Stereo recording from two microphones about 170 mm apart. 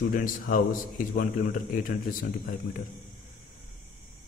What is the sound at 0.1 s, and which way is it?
Speech, 50° left (ahead or behind).